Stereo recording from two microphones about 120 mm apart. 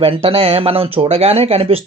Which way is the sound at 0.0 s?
50° right (ahead or behind).